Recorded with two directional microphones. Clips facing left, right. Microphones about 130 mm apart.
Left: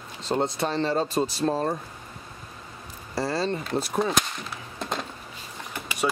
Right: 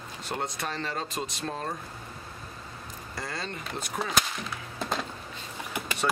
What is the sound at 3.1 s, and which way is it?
Speech, 30° left (ahead or behind).